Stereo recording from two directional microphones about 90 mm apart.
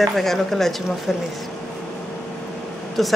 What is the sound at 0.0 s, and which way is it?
A woman's voice, centre (ahead or behind).